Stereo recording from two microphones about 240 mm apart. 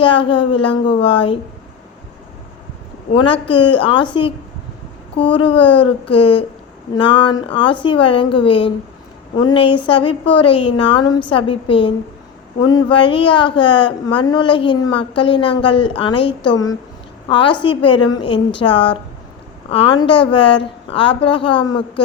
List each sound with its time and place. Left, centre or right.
0.0 s a woman's voice: left
3.1 s a woman's voice: left